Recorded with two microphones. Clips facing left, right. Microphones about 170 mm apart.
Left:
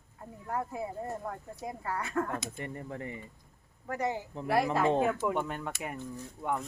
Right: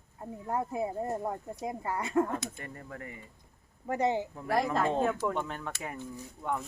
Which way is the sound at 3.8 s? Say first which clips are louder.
Right 4 dB; 25° right (ahead or behind).